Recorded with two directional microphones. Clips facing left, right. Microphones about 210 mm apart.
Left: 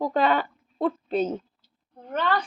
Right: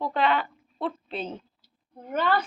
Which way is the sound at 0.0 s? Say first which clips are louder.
Left 3 dB; 40° left (ahead or behind).